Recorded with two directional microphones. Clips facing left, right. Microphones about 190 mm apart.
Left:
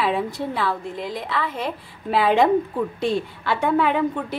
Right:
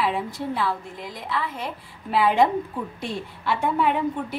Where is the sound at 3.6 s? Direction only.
90° left.